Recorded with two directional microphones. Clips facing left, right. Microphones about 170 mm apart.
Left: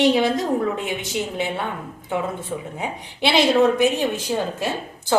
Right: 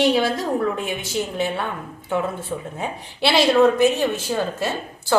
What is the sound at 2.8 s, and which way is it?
Speech, 15° left (ahead or behind).